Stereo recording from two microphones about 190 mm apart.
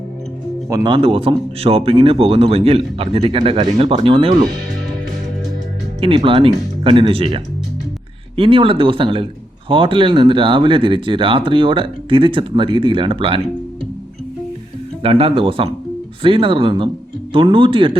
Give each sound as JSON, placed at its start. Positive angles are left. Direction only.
{"t": 0.7, "sound": "speech", "side_deg": -20}
{"t": 6.0, "sound": "speech", "side_deg": -30}
{"t": 15.0, "sound": "speech", "side_deg": -30}